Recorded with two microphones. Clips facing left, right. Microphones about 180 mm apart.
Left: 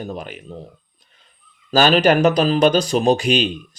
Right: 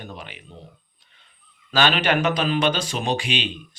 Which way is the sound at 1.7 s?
40° left (ahead or behind).